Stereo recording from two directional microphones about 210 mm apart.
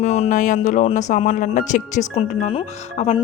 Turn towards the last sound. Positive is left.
turn(degrees=30)  # may be behind; listen again after turning